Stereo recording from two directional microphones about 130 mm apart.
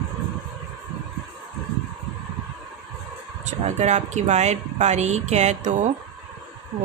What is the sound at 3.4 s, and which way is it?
Speech, 65° right (ahead or behind).